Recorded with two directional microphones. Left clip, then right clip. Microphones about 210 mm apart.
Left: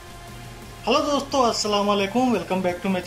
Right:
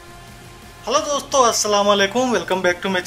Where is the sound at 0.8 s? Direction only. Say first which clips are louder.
Right 1 dB; 5° left (ahead or behind).